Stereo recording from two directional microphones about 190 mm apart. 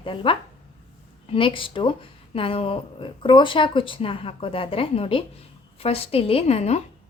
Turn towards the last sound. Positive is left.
turn(degrees=35)  # may be behind; listen again after turning